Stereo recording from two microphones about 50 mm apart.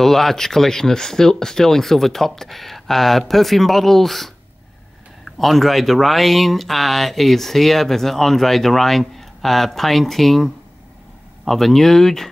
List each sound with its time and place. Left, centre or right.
0.0 s speech: centre